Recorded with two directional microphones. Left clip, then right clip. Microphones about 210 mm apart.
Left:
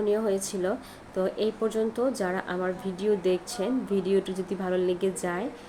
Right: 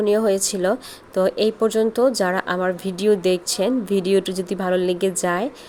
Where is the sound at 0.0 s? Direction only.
50° right (ahead or behind).